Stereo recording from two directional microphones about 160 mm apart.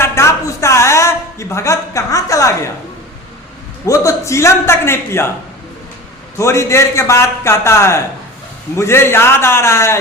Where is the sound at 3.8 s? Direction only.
20° left (ahead or behind).